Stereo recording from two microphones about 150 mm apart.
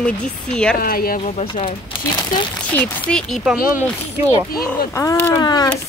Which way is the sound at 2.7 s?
5° left (ahead or behind).